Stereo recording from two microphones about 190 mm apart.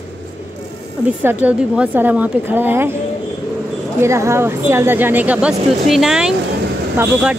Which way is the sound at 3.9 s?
15° right (ahead or behind).